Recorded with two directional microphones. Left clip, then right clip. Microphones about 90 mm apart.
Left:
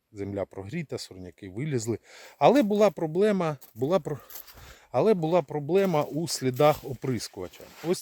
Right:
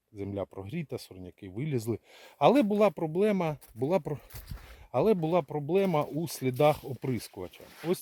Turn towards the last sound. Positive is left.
turn(degrees=-5)  # may be behind; listen again after turning